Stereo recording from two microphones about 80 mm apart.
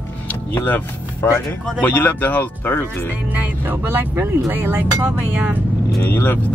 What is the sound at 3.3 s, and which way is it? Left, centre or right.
Speech, right.